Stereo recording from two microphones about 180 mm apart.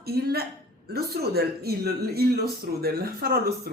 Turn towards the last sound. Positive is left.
turn(degrees=-60)  # may be behind; listen again after turning